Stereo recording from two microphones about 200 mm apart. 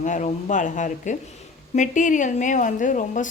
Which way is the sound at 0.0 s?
40° left (ahead or behind).